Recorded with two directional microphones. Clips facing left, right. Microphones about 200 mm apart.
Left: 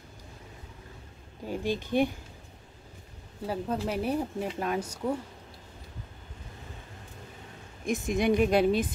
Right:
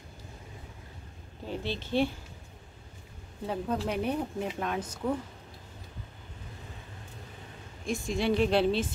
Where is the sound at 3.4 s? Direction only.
5° left (ahead or behind).